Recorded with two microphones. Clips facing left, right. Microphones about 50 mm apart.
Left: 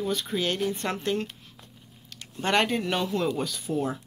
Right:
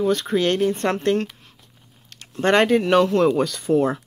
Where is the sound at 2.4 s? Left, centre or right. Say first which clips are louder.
Right 8 dB; right.